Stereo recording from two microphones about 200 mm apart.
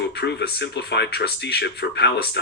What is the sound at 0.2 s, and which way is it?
Speech, 55° left (ahead or behind).